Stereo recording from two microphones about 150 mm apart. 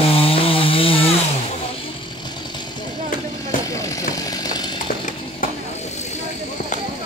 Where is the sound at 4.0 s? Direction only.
25° left (ahead or behind).